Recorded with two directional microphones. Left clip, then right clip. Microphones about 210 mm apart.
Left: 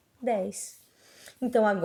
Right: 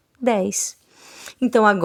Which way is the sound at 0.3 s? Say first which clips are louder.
Right 9 dB; 45° right (ahead or behind).